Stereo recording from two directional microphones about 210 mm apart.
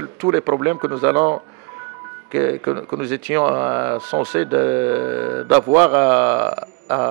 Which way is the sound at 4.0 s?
25° right (ahead or behind).